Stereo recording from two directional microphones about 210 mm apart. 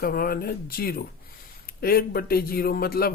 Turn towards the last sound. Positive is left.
turn(degrees=45)  # may be behind; listen again after turning